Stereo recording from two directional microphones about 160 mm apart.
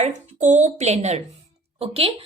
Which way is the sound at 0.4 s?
45° right (ahead or behind).